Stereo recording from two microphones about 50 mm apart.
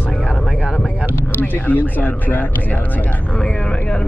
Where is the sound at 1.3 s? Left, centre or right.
Left.